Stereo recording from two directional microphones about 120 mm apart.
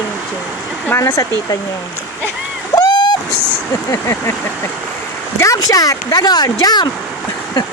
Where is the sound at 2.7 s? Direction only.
35° left (ahead or behind).